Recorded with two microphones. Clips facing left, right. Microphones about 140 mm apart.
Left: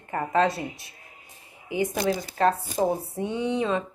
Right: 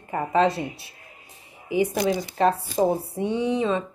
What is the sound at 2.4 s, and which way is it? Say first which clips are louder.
Speech: right 1 dB; 20° right (ahead or behind).